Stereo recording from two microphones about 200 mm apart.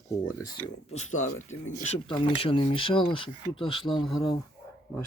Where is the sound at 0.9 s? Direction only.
35° left (ahead or behind).